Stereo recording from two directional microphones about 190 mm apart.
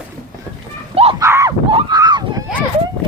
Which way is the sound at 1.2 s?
15° right (ahead or behind).